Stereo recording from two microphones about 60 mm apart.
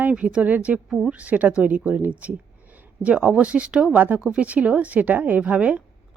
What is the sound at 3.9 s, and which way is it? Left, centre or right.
Speech, right.